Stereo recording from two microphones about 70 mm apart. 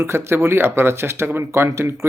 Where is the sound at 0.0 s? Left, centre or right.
Right.